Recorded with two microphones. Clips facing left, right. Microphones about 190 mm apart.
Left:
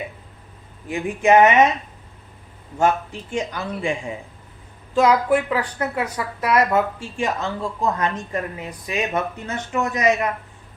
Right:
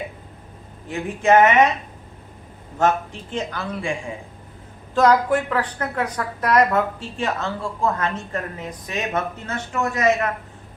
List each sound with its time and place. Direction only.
0.9 s a woman's voice: 15° left (ahead or behind)
2.7 s a woman's voice: 10° left (ahead or behind)
4.9 s a woman's voice: 10° left (ahead or behind)